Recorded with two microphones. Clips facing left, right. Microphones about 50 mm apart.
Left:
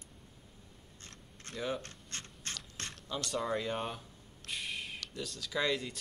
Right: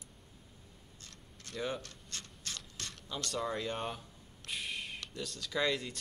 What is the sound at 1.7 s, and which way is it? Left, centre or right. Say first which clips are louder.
Mechanisms: left 2 dB; left.